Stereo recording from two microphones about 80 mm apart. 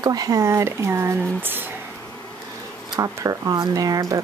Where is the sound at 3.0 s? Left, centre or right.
Right.